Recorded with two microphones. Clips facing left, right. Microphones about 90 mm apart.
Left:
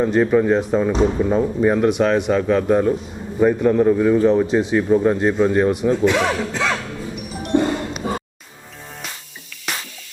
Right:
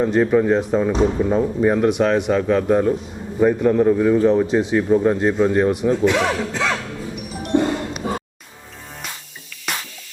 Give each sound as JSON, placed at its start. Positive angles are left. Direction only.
{"t": 0.0, "sound": "speech", "side_deg": 25}
{"t": 6.1, "sound": "music", "side_deg": 15}